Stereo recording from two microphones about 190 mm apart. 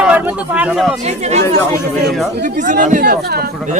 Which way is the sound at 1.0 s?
35° right (ahead or behind).